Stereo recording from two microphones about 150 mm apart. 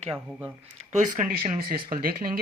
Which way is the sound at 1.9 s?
70° right (ahead or behind).